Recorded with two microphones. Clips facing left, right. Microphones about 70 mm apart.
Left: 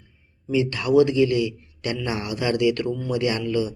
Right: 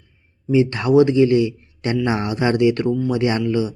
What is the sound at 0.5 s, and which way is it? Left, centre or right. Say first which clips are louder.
Speech: right 4 dB; right.